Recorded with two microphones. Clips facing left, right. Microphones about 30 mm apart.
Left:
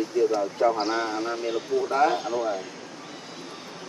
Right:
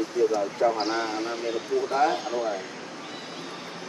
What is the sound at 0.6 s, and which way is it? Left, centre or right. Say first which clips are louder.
Speech: left 1 dB; centre.